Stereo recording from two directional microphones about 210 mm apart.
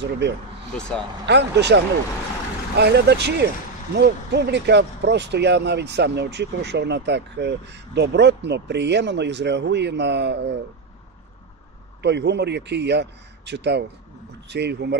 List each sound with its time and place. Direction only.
0.2 s speech: 55° right (ahead or behind)
0.7 s speech: 5° left (ahead or behind)
1.2 s a man's voice: 55° right (ahead or behind)
12.0 s a man's voice: 55° right (ahead or behind)